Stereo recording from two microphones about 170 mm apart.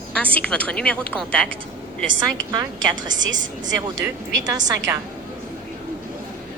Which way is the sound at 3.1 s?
90° right.